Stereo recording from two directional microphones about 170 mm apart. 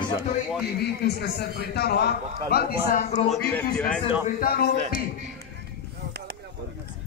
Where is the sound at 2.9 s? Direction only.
50° left (ahead or behind).